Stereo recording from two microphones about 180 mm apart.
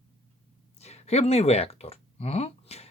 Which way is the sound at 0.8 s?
35° left (ahead or behind).